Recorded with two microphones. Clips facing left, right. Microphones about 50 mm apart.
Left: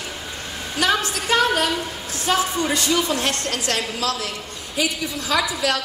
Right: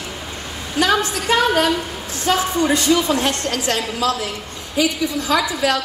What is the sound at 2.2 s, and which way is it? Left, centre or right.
A woman's voice, right.